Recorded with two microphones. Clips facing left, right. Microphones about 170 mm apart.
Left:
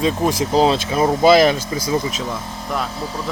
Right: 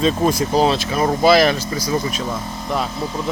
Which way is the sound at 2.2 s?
5° right (ahead or behind).